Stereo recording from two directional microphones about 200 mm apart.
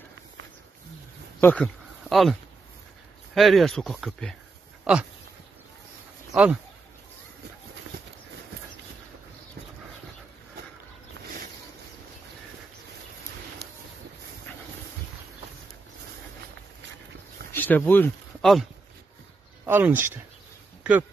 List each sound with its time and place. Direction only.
1.4 s speech: 5° left (ahead or behind)
3.3 s speech: centre (ahead or behind)
6.3 s speech: 5° right (ahead or behind)
13.6 s a sound: 55° right (ahead or behind)
17.5 s speech: 10° left (ahead or behind)
19.6 s speech: 10° right (ahead or behind)